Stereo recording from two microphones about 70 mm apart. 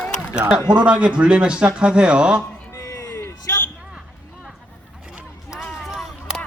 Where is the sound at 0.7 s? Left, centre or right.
Centre.